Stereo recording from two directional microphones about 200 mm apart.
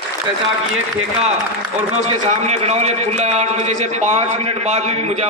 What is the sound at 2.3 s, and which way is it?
A man's voice, 35° right (ahead or behind).